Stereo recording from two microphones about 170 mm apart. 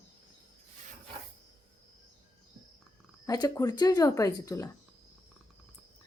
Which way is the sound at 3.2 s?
20° left (ahead or behind).